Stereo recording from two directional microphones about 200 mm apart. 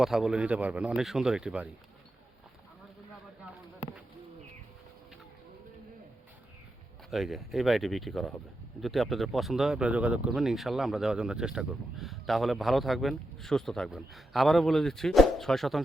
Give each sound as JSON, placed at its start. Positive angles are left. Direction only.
{"t": 0.0, "sound": "speech", "side_deg": 0}
{"t": 7.1, "sound": "speech", "side_deg": 0}